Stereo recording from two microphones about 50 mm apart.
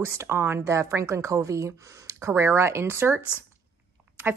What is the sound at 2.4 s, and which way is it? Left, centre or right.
Speech, right.